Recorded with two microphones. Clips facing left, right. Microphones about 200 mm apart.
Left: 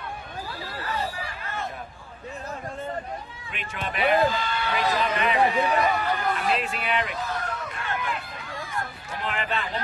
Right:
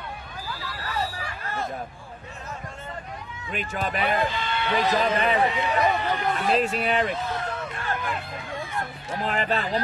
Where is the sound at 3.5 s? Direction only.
40° right (ahead or behind).